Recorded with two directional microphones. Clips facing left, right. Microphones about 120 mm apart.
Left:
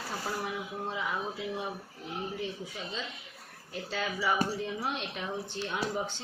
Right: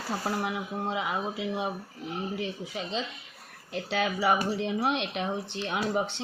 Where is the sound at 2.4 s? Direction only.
90° right.